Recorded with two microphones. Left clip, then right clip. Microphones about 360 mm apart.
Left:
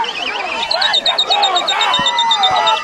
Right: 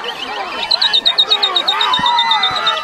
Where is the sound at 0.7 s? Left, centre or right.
Centre.